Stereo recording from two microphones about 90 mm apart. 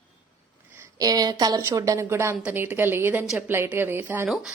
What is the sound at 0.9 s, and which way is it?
A woman's voice, 45° right (ahead or behind).